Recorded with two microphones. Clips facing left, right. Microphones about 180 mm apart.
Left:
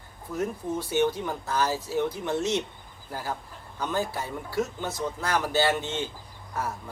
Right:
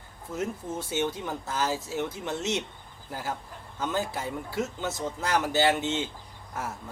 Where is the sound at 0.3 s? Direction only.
20° right (ahead or behind).